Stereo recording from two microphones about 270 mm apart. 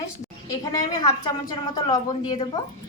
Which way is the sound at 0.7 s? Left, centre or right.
Centre.